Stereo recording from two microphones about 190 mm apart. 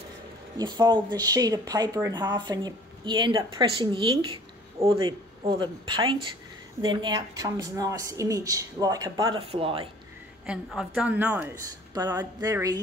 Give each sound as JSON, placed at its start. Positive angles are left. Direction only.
{"t": 0.6, "sound": "speech", "side_deg": -20}
{"t": 9.4, "sound": "speech", "side_deg": -30}
{"t": 10.4, "sound": "a woman's voice", "side_deg": -5}